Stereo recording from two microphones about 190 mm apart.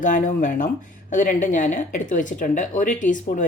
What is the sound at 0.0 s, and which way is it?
Speech, 40° left (ahead or behind).